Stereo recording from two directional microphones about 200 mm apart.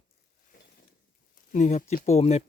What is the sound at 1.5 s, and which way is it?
Speech, 40° left (ahead or behind).